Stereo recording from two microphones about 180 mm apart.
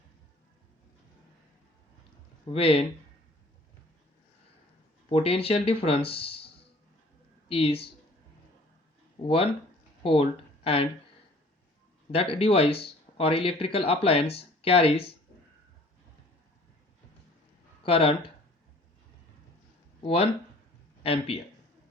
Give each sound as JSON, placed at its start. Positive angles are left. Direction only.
{"t": 2.5, "sound": "speech", "side_deg": 30}
{"t": 5.0, "sound": "speech", "side_deg": 30}
{"t": 7.4, "sound": "speech", "side_deg": 30}
{"t": 9.2, "sound": "speech", "side_deg": 30}
{"t": 12.1, "sound": "speech", "side_deg": 30}
{"t": 17.8, "sound": "speech", "side_deg": 30}
{"t": 20.0, "sound": "speech", "side_deg": 30}